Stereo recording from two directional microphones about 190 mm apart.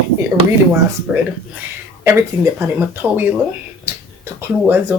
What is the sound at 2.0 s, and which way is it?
Speech, 15° right (ahead or behind).